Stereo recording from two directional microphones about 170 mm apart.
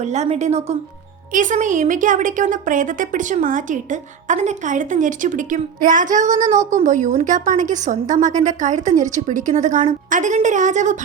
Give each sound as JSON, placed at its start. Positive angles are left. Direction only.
{"t": 0.0, "sound": "a woman's voice", "side_deg": -40}